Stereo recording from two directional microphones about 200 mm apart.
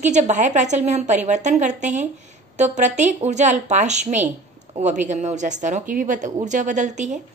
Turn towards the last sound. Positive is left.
turn(degrees=-35)  # may be behind; listen again after turning